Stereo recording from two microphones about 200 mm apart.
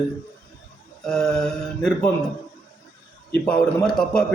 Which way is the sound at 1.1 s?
5° left (ahead or behind).